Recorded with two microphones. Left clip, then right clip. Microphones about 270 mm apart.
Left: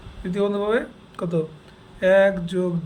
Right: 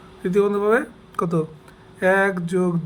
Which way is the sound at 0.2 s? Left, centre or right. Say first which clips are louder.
Right 4 dB; centre.